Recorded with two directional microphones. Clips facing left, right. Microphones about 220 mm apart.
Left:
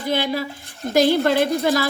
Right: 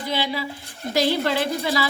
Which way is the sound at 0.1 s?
50° left (ahead or behind).